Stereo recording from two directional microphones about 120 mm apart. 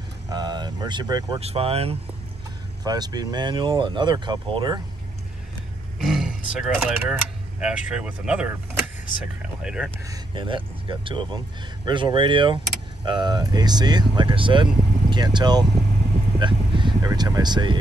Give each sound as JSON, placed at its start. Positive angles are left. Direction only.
{"t": 0.3, "sound": "vehicle", "side_deg": -35}
{"t": 1.4, "sound": "speech", "side_deg": -60}
{"t": 2.8, "sound": "speech", "side_deg": -35}
{"t": 6.0, "sound": "speech", "side_deg": 0}
{"t": 10.3, "sound": "speech", "side_deg": -45}